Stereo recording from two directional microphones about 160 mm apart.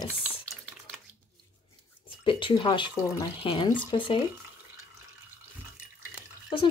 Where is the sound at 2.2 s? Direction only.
30° left (ahead or behind).